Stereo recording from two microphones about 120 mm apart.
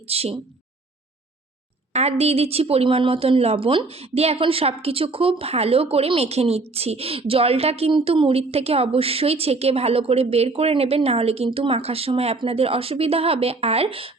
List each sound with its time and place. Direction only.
0.1 s a woman's voice: 55° right (ahead or behind)
1.9 s a woman's voice: 65° right (ahead or behind)